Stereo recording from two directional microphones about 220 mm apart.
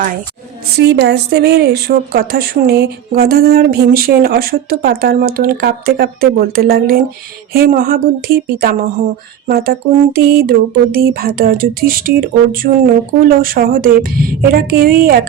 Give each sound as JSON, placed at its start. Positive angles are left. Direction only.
{"t": 0.8, "sound": "speech", "side_deg": -50}
{"t": 9.5, "sound": "speech", "side_deg": -45}